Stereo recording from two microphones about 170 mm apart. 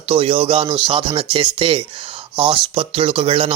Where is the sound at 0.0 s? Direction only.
30° right (ahead or behind).